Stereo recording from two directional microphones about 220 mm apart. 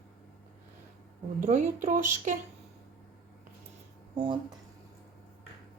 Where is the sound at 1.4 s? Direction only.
35° right (ahead or behind).